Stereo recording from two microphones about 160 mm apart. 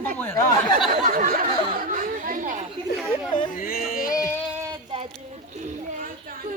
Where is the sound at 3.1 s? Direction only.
30° left (ahead or behind).